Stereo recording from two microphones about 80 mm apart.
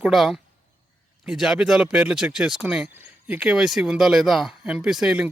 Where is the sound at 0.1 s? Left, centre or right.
Centre.